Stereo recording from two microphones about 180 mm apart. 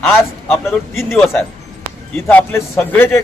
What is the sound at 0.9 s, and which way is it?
A man's voice, centre (ahead or behind).